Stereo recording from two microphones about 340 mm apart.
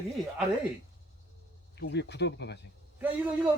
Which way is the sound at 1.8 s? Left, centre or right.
Left.